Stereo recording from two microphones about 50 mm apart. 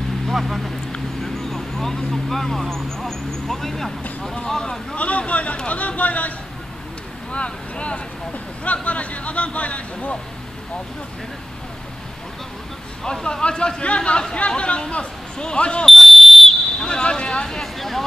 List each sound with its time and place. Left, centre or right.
0.3 s speech: centre
4.9 s speech: left
7.3 s speech: left
13.0 s speech: centre
15.8 s a sound: centre
17.5 s speech: centre